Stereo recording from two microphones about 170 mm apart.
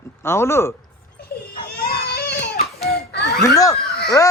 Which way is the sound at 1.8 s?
70° left (ahead or behind).